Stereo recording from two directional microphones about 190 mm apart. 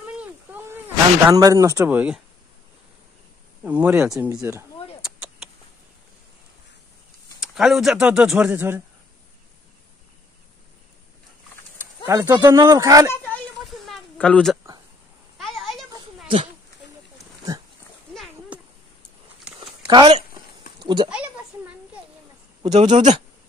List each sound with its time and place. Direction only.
0.0 s a sound: 10° right (ahead or behind)
1.2 s speech: 15° right (ahead or behind)
3.6 s speech: 10° right (ahead or behind)
4.3 s speech: 15° right (ahead or behind)
5.0 s vehicle: 5° right (ahead or behind)
7.4 s speech: centre (ahead or behind)
12.1 s speech: 15° right (ahead or behind)
13.1 s a sound: 10° left (ahead or behind)
17.5 s speech: 15° right (ahead or behind)
18.1 s a sound: centre (ahead or behind)
19.9 s speech: 25° right (ahead or behind)
22.6 s a man's voice: 35° right (ahead or behind)